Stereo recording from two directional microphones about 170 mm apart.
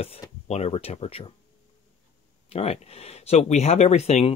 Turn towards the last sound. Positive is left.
turn(degrees=40)  # may be behind; listen again after turning